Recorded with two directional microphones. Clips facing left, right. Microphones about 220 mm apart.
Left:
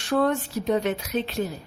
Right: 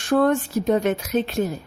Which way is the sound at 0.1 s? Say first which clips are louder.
Right 4 dB; 50° right (ahead or behind).